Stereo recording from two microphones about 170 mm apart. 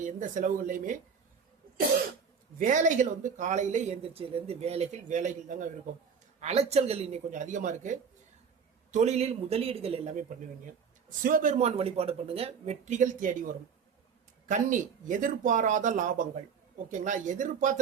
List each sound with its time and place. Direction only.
0.0 s speech: 50° right (ahead or behind)
2.6 s speech: 50° right (ahead or behind)
11.2 s speech: 55° right (ahead or behind)